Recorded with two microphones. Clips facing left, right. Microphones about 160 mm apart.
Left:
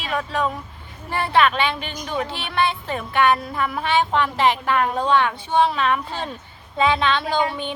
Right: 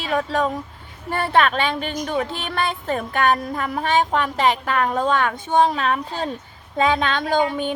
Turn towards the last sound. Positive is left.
turn(degrees=-45)  # may be behind; listen again after turning